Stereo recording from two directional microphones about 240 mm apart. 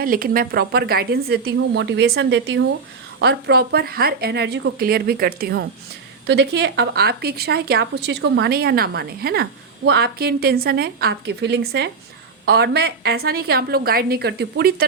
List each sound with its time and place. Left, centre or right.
0.0 s speech: right